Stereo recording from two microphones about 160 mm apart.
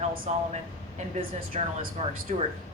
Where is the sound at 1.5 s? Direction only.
40° right (ahead or behind).